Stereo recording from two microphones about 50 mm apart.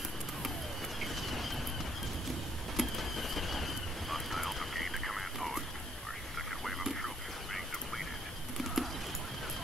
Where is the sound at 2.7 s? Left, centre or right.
Centre.